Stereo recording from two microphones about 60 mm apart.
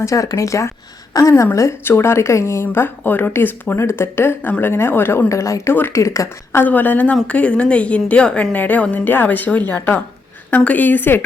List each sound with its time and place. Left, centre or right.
0.0 s speech: left
1.2 s a woman's voice: left
1.8 s a woman's voice: left
3.8 s a woman's voice: left
5.3 s speech: left
6.6 s a woman's voice: left